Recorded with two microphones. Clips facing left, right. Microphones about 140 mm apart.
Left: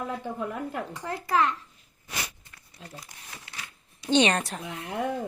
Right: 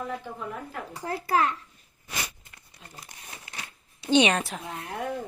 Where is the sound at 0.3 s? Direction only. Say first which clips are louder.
Left 4 dB; 75° left (ahead or behind).